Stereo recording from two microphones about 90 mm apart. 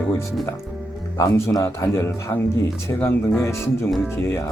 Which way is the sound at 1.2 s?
30° left (ahead or behind).